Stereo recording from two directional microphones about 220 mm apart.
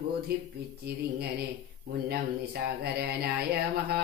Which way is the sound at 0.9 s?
45° right (ahead or behind).